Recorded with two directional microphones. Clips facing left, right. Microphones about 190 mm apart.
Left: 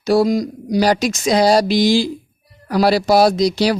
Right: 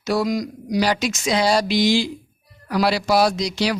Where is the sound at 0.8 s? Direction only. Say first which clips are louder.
Left 5 dB; 40° left (ahead or behind).